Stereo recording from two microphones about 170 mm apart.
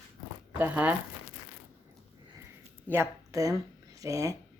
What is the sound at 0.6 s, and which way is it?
Speech, 10° right (ahead or behind).